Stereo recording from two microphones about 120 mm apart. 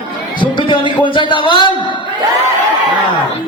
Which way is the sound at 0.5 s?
45° left (ahead or behind).